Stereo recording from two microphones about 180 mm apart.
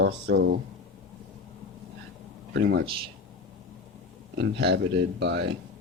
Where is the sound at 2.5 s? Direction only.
65° right (ahead or behind).